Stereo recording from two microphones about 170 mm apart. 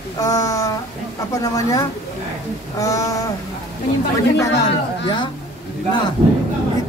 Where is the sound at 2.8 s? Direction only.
20° left (ahead or behind).